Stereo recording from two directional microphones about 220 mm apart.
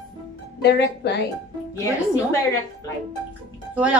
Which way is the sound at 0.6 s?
50° left (ahead or behind).